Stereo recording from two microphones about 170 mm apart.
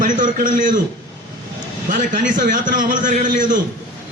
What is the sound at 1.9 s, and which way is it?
A man's voice, 50° right (ahead or behind).